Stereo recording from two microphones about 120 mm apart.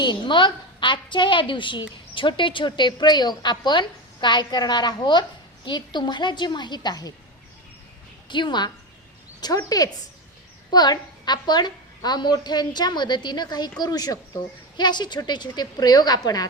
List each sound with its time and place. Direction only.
0.0 s a woman's voice: 40° left (ahead or behind)
8.3 s a woman's voice: 40° left (ahead or behind)